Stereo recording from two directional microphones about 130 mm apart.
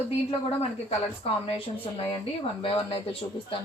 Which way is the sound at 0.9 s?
50° left (ahead or behind).